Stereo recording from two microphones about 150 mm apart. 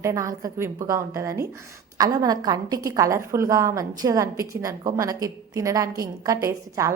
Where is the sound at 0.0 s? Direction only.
20° right (ahead or behind).